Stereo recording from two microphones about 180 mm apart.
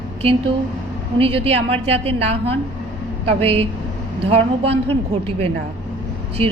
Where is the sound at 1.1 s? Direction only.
30° right (ahead or behind).